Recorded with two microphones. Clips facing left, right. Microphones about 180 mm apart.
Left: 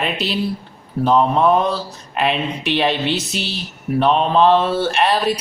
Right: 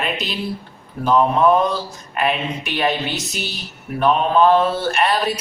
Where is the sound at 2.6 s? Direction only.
30° left (ahead or behind).